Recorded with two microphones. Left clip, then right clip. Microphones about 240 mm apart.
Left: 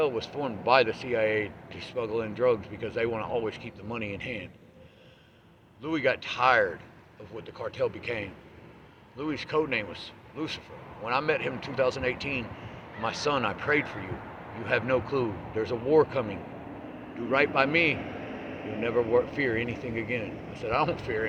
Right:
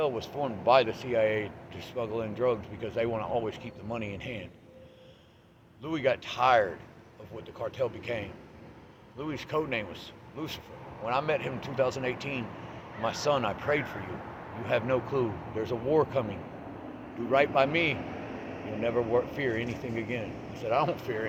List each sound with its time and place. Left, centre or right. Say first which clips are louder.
0.0 s speech: left 2 dB; left
5.8 s speech: left 1 dB; left